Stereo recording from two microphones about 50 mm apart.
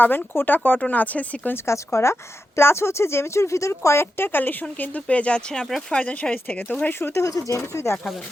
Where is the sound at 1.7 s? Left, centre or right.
Left.